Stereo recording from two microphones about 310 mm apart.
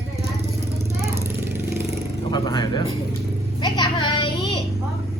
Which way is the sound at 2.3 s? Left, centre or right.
Centre.